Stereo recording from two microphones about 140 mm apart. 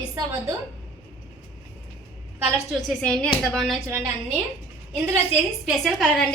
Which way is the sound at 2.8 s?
5° left (ahead or behind).